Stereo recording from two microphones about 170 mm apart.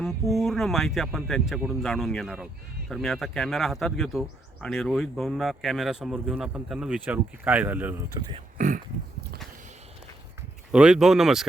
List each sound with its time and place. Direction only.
0.0 s speech: centre (ahead or behind)
8.5 s a sound: 50° right (ahead or behind)
10.7 s speech: 5° right (ahead or behind)